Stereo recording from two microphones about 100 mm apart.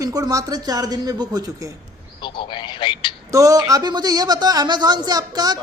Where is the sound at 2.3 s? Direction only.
55° left (ahead or behind).